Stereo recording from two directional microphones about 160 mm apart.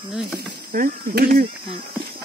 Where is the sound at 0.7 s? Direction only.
65° right (ahead or behind).